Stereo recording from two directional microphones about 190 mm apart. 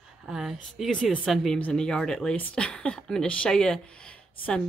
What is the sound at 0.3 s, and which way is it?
Speech, centre (ahead or behind).